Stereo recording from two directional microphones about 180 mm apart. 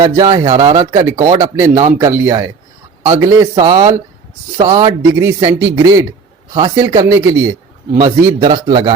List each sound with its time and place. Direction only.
0.0 s speech: 20° right (ahead or behind)